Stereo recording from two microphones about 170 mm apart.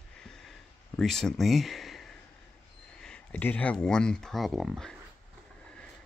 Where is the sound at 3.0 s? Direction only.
5° left (ahead or behind).